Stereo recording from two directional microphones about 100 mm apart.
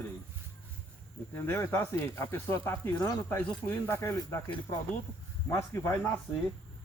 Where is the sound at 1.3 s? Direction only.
25° left (ahead or behind).